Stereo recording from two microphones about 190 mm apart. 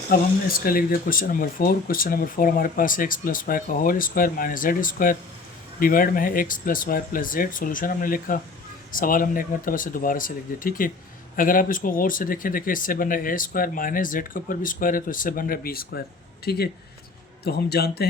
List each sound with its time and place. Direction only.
0.1 s a man's voice: 50° left (ahead or behind)